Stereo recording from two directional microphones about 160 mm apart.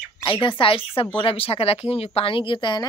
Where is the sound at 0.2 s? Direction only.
30° left (ahead or behind).